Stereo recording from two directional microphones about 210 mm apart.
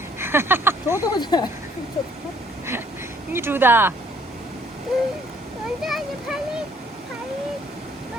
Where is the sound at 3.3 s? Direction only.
10° right (ahead or behind).